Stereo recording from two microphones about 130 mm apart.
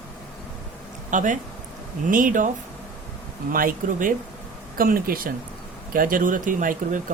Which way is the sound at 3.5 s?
90° right.